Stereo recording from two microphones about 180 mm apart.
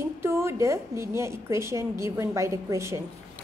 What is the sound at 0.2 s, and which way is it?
A woman's voice, 15° right (ahead or behind).